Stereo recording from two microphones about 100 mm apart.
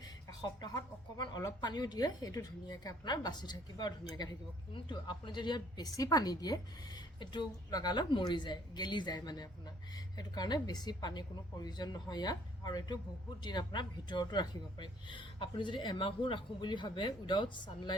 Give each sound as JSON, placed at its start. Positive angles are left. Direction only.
{"t": 0.6, "sound": "a woman's voice", "side_deg": 40}
{"t": 4.7, "sound": "a woman's voice", "side_deg": 50}